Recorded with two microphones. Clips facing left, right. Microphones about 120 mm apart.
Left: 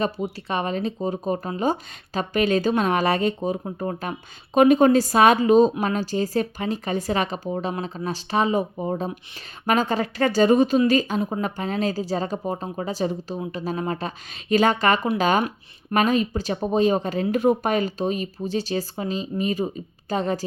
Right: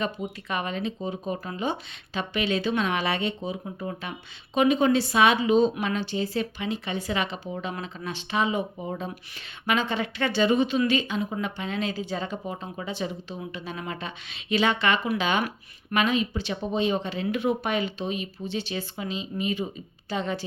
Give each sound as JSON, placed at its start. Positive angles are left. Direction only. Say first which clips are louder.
{"t": 0.0, "sound": "speech", "louder": "left 5 dB", "side_deg": 35}